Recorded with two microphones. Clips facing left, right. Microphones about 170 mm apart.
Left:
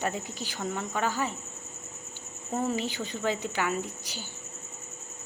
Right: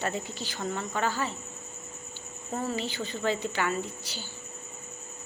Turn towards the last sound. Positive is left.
turn(degrees=15)  # may be behind; listen again after turning